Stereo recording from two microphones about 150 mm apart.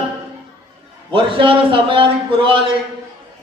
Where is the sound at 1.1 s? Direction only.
35° right (ahead or behind).